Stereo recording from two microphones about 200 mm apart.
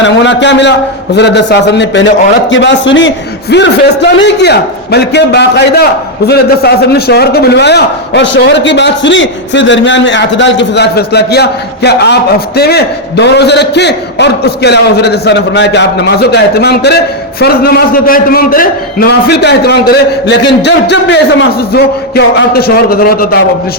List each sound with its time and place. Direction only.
0.0 s a man's voice: 65° left (ahead or behind); by 23.4 s 45° left (ahead or behind)